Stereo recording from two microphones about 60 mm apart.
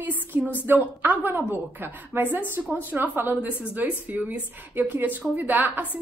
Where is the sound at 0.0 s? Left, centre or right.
Right.